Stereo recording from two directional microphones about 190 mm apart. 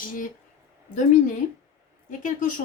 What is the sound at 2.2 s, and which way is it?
Speech, 40° left (ahead or behind).